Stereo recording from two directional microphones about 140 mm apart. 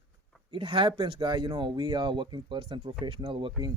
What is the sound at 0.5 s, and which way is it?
Speech, 40° right (ahead or behind).